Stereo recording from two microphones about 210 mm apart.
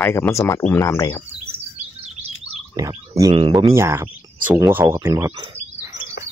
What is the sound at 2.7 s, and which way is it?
Speech, 15° right (ahead or behind).